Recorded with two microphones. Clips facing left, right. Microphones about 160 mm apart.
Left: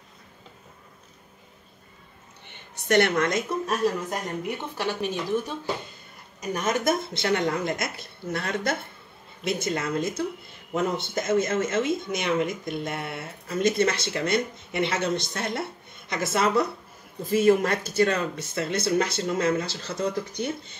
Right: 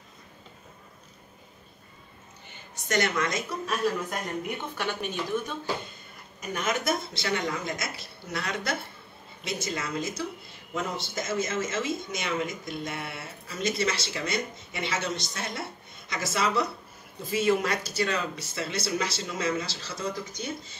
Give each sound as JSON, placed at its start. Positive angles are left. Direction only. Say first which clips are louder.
{"t": 2.5, "sound": "a woman's voice", "louder": "left 7 dB", "side_deg": 65}
{"t": 4.7, "sound": "speech", "louder": "left 4 dB", "side_deg": 35}
{"t": 6.5, "sound": "speech", "louder": "left 4 dB", "side_deg": 40}